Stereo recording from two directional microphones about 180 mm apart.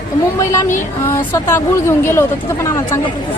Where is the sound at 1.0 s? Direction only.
15° left (ahead or behind).